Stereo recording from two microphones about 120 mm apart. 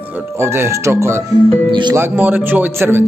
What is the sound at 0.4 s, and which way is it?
Speech, 20° right (ahead or behind).